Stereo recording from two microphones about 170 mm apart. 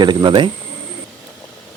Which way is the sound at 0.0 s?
25° right (ahead or behind).